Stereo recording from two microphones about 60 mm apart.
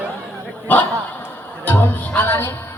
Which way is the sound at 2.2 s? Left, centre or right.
Left.